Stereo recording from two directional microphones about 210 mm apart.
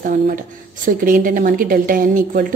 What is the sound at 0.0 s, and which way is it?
A woman's voice, 40° right (ahead or behind).